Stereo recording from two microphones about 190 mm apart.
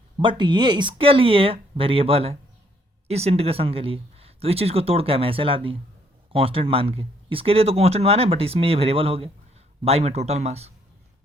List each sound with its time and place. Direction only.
0.2 s speech: 25° right (ahead or behind)